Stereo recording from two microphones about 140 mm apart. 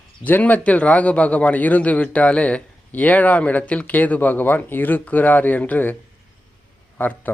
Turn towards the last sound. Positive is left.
turn(degrees=15)  # may be behind; listen again after turning